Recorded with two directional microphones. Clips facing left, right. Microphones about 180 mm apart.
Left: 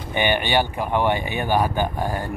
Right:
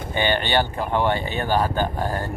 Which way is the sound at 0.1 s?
15° left (ahead or behind).